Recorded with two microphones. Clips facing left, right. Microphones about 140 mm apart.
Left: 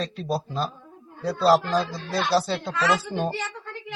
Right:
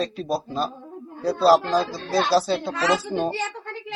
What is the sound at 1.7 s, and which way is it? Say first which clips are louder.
Speech: right 3 dB; 25° right (ahead or behind).